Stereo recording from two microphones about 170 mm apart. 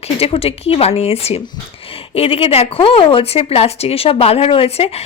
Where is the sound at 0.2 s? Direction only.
35° left (ahead or behind).